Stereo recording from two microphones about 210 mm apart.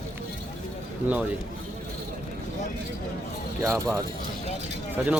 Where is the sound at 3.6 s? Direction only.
15° right (ahead or behind).